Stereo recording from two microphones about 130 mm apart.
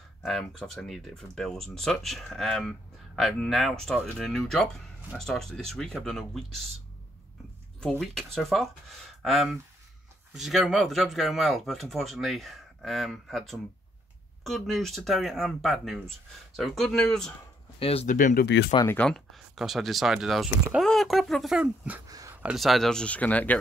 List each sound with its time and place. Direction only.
0.2 s speech: centre (ahead or behind)
7.8 s speech: centre (ahead or behind)
17.7 s speech: 50° left (ahead or behind)
18.0 s speech: 90° left
18.9 s speech: 10° left (ahead or behind); by 22.0 s 10° right (ahead or behind)
22.0 s a sound: 25° right (ahead or behind)
22.3 s a sound: 10° right (ahead or behind)
22.6 s speech: centre (ahead or behind)